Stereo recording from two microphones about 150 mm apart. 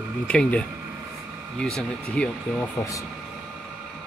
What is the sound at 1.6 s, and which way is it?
Speech, 5° left (ahead or behind).